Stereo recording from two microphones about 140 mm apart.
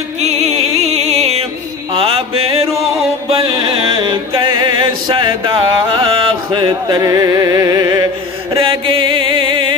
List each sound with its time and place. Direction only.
0.2 s music: 50° right (ahead or behind)
2.8 s music: centre (ahead or behind)
3.3 s music: 40° right (ahead or behind)
8.5 s music: 40° right (ahead or behind)